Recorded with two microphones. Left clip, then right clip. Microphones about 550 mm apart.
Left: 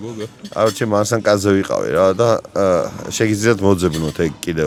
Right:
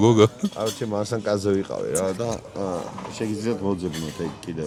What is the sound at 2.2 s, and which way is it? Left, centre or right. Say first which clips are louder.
Speech: left 13 dB; left.